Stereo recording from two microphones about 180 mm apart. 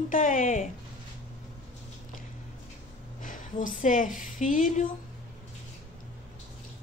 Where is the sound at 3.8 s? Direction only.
45° left (ahead or behind).